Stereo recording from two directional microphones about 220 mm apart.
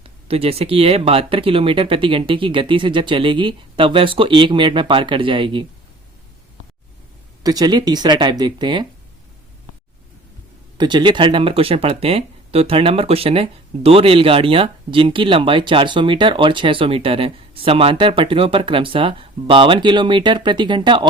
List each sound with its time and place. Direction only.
0.3 s speech: 25° right (ahead or behind)
7.4 s speech: 20° right (ahead or behind)
10.8 s speech: 20° right (ahead or behind)